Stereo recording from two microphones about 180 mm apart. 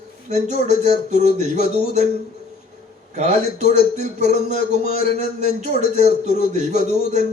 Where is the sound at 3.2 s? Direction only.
40° right (ahead or behind).